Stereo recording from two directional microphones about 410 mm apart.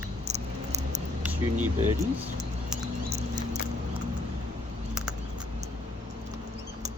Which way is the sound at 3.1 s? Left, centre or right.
Centre.